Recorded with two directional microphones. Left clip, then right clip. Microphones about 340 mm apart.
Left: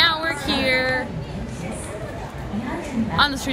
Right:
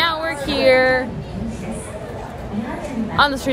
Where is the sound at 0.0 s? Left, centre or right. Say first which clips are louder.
Even; centre.